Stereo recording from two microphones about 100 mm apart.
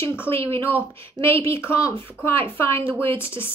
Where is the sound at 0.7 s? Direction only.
25° left (ahead or behind).